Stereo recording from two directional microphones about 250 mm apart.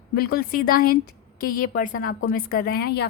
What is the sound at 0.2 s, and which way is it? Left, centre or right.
A woman's voice, left.